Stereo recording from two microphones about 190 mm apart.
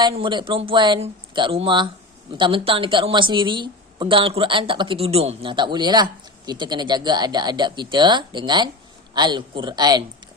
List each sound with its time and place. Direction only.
0.0 s a woman's voice: 25° right (ahead or behind)